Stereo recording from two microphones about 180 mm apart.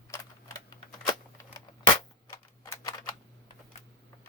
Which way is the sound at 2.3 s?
15° left (ahead or behind).